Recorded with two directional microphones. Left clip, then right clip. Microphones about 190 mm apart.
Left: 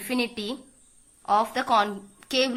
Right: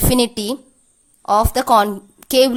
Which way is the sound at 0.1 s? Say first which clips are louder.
Right 8 dB; 80° right.